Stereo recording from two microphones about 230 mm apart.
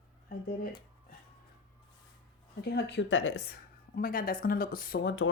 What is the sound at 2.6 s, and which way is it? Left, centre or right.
Speech, left.